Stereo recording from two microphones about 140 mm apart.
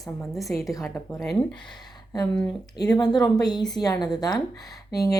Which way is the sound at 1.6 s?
30° left (ahead or behind).